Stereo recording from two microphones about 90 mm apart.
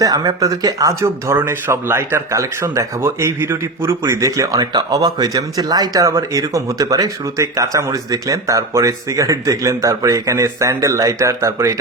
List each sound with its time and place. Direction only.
0.0 s speech: 45° right (ahead or behind)